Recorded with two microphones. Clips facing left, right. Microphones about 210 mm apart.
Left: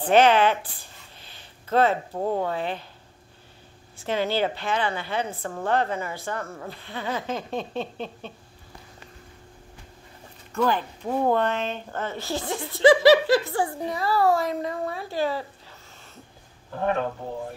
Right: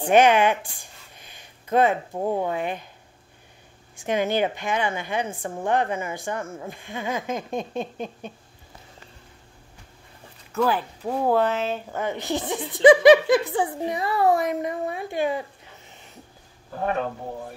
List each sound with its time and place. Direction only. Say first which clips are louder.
0.0 s speech: right 1 dB; 15° right (ahead or behind)
3.9 s speech: right 2 dB; 15° right (ahead or behind)
10.5 s speech: right 1 dB; 5° right (ahead or behind)